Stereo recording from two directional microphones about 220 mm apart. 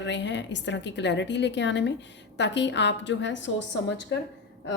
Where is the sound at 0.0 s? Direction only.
55° left (ahead or behind).